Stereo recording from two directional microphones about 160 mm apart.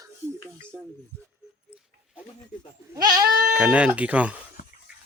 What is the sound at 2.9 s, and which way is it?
Speech, 25° right (ahead or behind).